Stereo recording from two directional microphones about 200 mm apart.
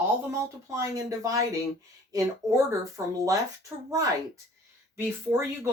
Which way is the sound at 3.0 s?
15° right (ahead or behind).